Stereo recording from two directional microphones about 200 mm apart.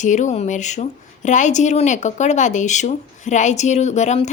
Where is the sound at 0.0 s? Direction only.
35° left (ahead or behind).